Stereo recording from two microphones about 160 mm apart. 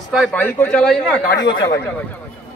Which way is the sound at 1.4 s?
25° left (ahead or behind).